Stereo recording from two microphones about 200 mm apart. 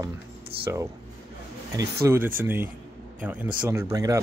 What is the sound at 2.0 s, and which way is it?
Speech, 15° right (ahead or behind).